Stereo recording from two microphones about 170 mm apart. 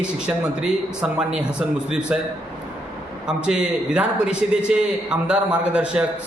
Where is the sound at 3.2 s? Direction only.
5° right (ahead or behind).